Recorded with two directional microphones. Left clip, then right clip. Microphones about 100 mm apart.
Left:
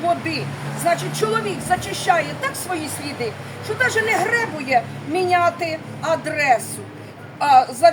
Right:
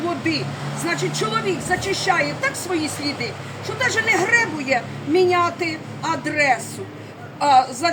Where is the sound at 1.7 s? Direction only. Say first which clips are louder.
Left 2 dB; 35° left (ahead or behind).